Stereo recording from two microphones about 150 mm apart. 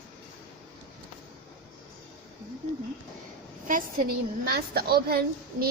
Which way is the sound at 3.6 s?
65° right (ahead or behind).